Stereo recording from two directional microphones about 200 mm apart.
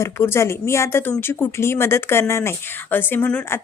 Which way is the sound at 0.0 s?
15° left (ahead or behind).